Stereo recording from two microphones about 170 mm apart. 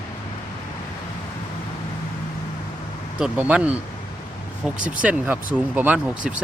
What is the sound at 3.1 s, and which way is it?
Speech, 5° right (ahead or behind).